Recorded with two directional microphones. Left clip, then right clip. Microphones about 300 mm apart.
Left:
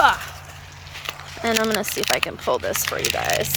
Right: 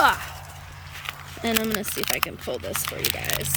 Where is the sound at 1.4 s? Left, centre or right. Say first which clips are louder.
Left 5 dB; centre.